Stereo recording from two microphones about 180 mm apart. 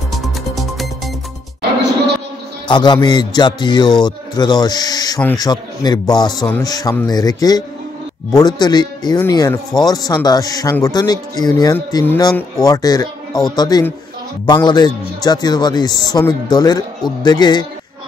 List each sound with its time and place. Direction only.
0.1 s music: centre (ahead or behind)
2.7 s a man's voice: 25° left (ahead or behind)
6.4 s a man's voice: 10° left (ahead or behind)